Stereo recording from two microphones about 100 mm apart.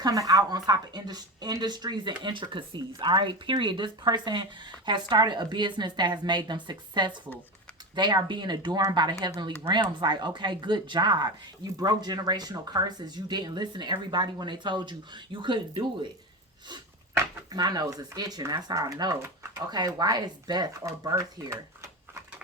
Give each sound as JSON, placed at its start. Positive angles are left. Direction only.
{"t": 0.0, "sound": "a woman's voice", "side_deg": -35}
{"t": 17.5, "sound": "speech", "side_deg": -40}